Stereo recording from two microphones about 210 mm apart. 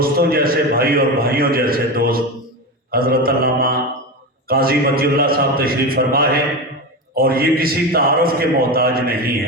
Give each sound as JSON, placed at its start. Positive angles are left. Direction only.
{"t": 0.0, "sound": "a man's voice", "side_deg": -45}
{"t": 2.9, "sound": "mantra", "side_deg": -45}
{"t": 4.4, "sound": "a man's voice", "side_deg": -45}